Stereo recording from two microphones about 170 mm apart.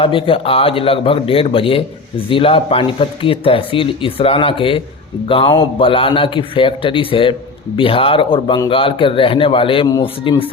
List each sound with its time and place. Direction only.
0.0 s speech: 30° left (ahead or behind)